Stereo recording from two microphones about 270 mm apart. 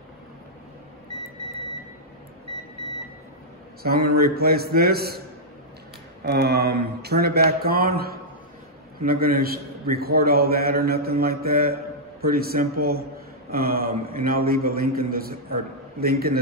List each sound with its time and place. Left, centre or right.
3.8 s a man's voice: right
6.2 s a man's voice: right